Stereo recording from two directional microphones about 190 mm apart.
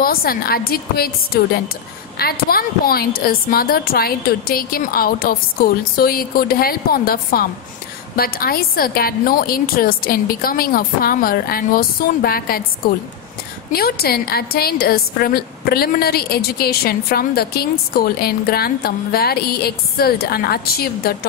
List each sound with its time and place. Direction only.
0.0 s a woman's voice: 50° left (ahead or behind)
13.7 s a woman's voice: 55° left (ahead or behind)